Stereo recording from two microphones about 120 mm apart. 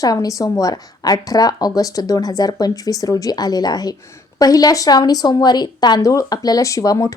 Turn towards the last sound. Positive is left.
turn(degrees=30)  # may be behind; listen again after turning